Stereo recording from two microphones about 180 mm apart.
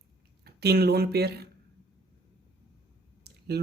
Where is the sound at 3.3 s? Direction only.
60° right (ahead or behind).